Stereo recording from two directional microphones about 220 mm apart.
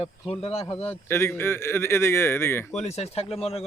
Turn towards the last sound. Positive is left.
turn(degrees=25)  # may be behind; listen again after turning